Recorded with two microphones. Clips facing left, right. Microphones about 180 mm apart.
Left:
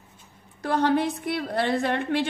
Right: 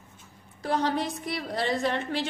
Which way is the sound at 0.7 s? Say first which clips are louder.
Left 4 dB; 60° left (ahead or behind).